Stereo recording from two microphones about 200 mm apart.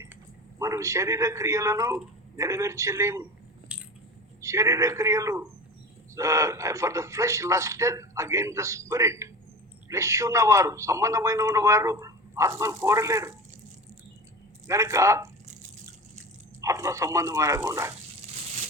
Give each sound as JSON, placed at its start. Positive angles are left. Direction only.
{"t": 0.6, "sound": "a man's voice", "side_deg": -15}
{"t": 3.7, "sound": "squish", "side_deg": -5}
{"t": 4.4, "sound": "a man's voice", "side_deg": -15}
{"t": 14.7, "sound": "a man's voice", "side_deg": -15}
{"t": 16.6, "sound": "a man's voice", "side_deg": -15}
{"t": 18.3, "sound": "a sound", "side_deg": -35}